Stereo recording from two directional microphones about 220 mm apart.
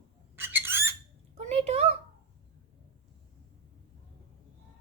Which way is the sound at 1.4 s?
30° right (ahead or behind).